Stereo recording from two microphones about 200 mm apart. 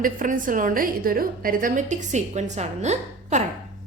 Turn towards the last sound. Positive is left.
turn(degrees=-35)  # may be behind; listen again after turning